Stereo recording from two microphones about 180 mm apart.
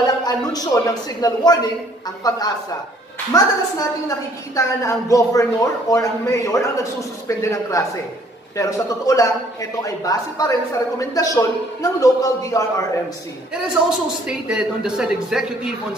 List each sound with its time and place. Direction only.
0.0 s a man's voice: 20° left (ahead or behind)
4.6 s a man's voice: 15° left (ahead or behind)
13.5 s speech: 5° right (ahead or behind)